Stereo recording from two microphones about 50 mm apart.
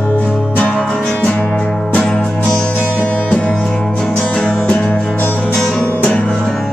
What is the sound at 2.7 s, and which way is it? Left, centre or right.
Music, right.